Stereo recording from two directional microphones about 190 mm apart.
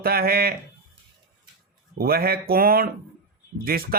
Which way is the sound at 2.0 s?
55° right (ahead or behind).